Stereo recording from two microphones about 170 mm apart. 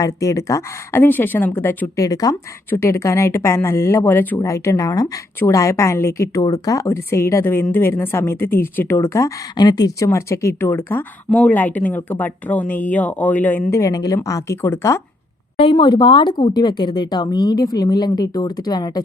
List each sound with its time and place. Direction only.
0.0 s a woman's voice: 20° left (ahead or behind)
15.5 s speech: 30° left (ahead or behind)